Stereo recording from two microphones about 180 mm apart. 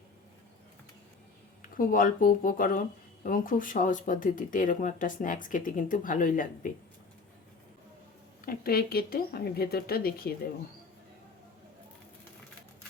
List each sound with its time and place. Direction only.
1.6 s speech: 50° left (ahead or behind)
8.4 s speech: 55° left (ahead or behind)